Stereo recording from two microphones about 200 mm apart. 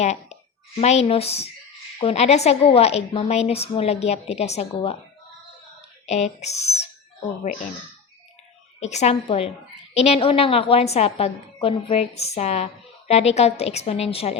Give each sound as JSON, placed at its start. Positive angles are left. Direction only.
{"t": 0.0, "sound": "a child's voice", "side_deg": 35}
{"t": 6.1, "sound": "speech", "side_deg": 35}
{"t": 8.8, "sound": "a woman's voice", "side_deg": 35}